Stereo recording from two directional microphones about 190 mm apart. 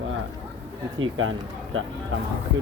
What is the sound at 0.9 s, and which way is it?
Speech, 90° right.